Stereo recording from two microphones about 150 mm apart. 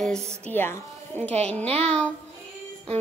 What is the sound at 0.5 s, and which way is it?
Speech, 15° left (ahead or behind).